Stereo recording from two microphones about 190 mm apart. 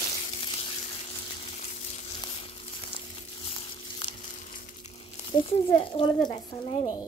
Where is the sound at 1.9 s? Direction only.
30° left (ahead or behind).